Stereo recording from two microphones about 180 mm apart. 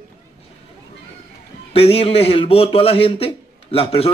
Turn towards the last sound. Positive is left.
turn(degrees=30)  # may be behind; listen again after turning